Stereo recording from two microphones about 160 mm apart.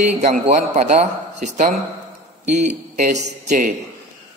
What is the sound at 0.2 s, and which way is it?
A man's voice, 45° right (ahead or behind).